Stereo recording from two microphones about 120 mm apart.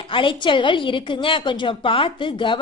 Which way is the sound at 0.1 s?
45° left (ahead or behind).